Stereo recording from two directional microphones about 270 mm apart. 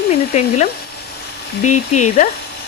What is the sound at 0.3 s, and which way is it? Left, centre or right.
Speech, left.